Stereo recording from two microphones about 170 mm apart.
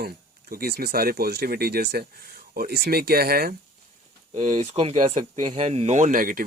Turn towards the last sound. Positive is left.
turn(degrees=-55)  # may be behind; listen again after turning